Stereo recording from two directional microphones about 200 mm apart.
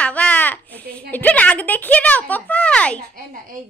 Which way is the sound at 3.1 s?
45° right (ahead or behind).